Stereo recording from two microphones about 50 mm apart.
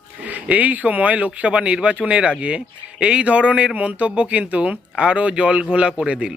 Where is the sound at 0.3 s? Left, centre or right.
Right.